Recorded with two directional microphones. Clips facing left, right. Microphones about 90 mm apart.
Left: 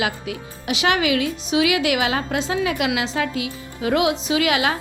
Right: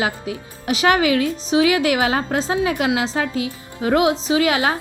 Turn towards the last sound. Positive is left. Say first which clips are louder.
# right 2 dB
turn(degrees=-35)  # may be behind; listen again after turning